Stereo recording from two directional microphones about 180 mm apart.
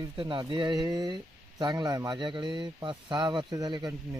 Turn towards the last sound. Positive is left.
turn(degrees=-20)  # may be behind; listen again after turning